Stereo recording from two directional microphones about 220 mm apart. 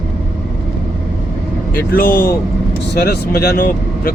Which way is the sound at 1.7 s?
45° left (ahead or behind).